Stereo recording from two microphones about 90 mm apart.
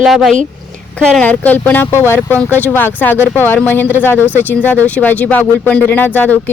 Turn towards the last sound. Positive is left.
turn(degrees=20)  # may be behind; listen again after turning